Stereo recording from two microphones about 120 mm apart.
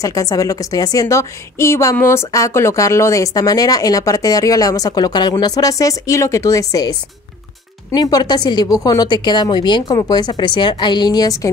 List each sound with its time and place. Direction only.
0.0 s a woman's voice: 30° left (ahead or behind)